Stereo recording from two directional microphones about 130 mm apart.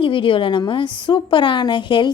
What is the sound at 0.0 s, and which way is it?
A woman's voice, 40° left (ahead or behind).